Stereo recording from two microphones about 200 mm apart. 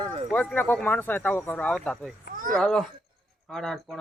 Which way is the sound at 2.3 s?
40° right (ahead or behind).